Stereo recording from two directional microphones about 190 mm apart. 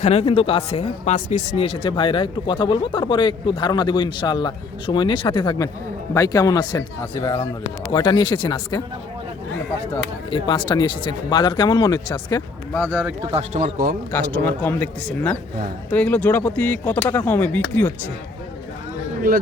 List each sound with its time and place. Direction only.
0.0 s speech: 35° left (ahead or behind)
10.2 s speech: 25° left (ahead or behind)
12.8 s speech: 10° right (ahead or behind)
13.3 s speech: 30° right (ahead or behind)
14.1 s speech: 10° left (ahead or behind)
19.3 s speech: 50° right (ahead or behind)